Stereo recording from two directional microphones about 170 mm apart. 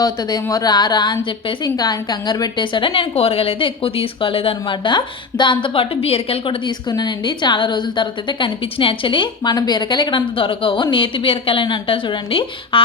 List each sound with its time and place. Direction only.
0.0 s a woman's voice: 25° left (ahead or behind)